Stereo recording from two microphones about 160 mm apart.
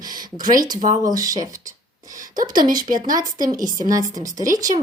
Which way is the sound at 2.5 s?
60° right (ahead or behind).